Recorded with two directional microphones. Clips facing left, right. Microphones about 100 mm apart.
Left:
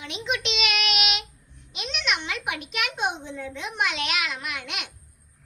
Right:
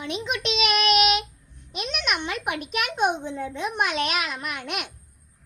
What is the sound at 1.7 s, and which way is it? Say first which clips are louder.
Child singing: right 1 dB; 45° right (ahead or behind).